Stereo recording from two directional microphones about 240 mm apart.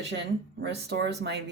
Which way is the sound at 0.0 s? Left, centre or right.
Right.